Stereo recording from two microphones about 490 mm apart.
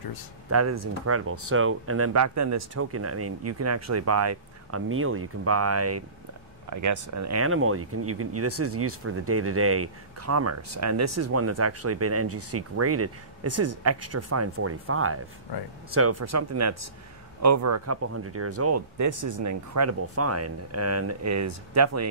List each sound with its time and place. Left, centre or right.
0.5 s speech: right
15.5 s speech: left
15.9 s speech: right